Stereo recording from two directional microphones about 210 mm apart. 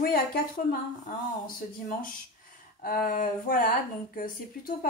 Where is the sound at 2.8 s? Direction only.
45° left (ahead or behind).